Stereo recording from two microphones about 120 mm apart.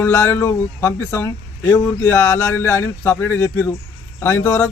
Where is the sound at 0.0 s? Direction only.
20° left (ahead or behind).